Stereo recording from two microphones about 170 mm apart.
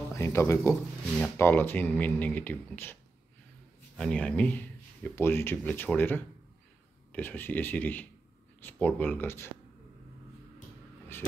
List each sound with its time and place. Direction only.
0.1 s speech: 15° left (ahead or behind)